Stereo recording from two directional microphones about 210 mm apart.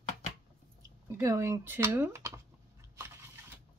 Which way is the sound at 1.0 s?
15° right (ahead or behind).